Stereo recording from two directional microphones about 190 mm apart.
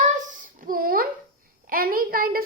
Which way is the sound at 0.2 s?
45° right (ahead or behind).